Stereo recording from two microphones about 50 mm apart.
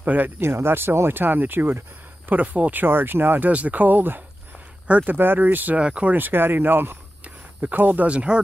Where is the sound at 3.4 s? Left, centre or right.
Right.